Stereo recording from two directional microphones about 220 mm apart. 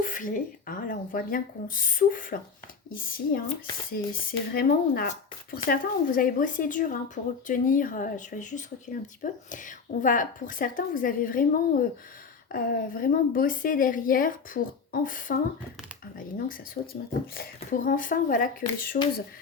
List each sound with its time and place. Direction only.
0.0 s speech: 35° left (ahead or behind)